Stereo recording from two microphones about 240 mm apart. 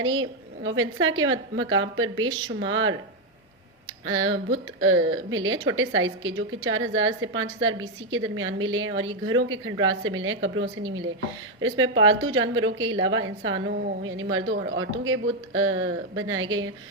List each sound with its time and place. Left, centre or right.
0.0 s speech: right